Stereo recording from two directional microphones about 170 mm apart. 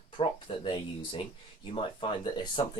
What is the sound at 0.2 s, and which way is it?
Speech, 30° left (ahead or behind).